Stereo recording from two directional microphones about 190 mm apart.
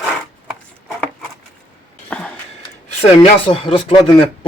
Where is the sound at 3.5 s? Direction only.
25° left (ahead or behind).